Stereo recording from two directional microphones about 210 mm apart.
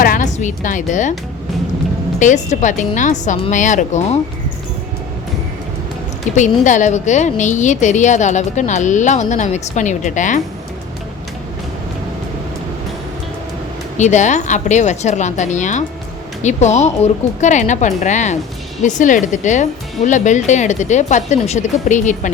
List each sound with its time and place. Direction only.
0.0 s a woman's voice: 40° left (ahead or behind)
2.1 s a woman's voice: 35° left (ahead or behind)
6.3 s a woman's voice: 35° left (ahead or behind)
14.0 s a woman's voice: 35° left (ahead or behind)